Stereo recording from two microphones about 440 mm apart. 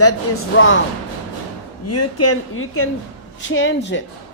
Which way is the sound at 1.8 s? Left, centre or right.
Left.